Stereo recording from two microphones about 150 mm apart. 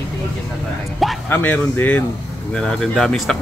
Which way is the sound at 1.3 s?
15° left (ahead or behind).